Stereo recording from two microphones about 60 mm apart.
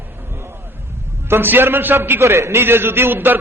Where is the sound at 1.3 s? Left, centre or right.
Right.